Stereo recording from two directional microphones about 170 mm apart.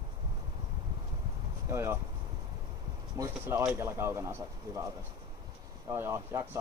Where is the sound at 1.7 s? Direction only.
15° right (ahead or behind).